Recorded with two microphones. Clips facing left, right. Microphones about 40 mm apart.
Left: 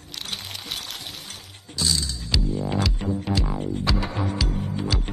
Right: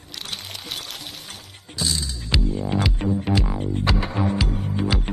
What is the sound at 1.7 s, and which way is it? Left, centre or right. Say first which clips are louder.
Music: left 1 dB; centre.